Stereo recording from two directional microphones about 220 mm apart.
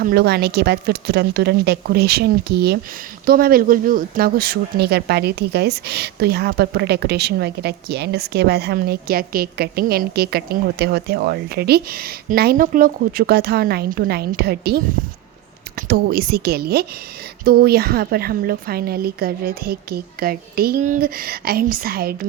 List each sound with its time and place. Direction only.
0.0 s speech: 45° right (ahead or behind)
15.9 s speech: 45° right (ahead or behind)